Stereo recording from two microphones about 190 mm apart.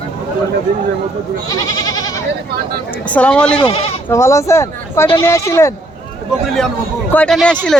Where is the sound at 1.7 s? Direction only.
20° left (ahead or behind).